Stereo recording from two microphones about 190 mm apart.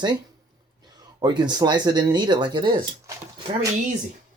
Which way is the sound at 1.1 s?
20° right (ahead or behind).